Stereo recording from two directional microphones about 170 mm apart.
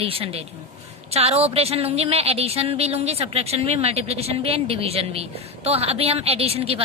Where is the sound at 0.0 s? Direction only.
35° right (ahead or behind).